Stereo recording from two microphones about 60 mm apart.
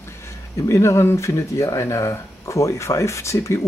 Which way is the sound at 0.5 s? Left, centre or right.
Left.